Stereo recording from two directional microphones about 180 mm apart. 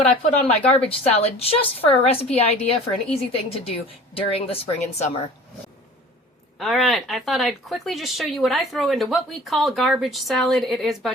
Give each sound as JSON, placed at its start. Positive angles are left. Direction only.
{"t": 0.7, "sound": "a woman's voice", "side_deg": 35}
{"t": 6.6, "sound": "speech", "side_deg": 0}